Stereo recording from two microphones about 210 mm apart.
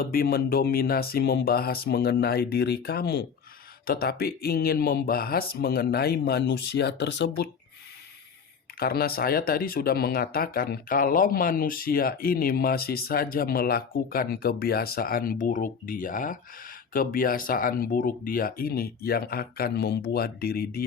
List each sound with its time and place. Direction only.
0.0 s speech: 45° left (ahead or behind)
8.8 s speech: 45° left (ahead or behind)